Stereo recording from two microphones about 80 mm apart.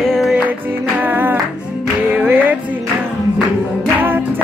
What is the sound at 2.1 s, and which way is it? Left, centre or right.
Music, right.